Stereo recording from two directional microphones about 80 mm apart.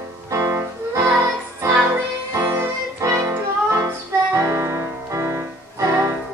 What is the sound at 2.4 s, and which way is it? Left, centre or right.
Music, right.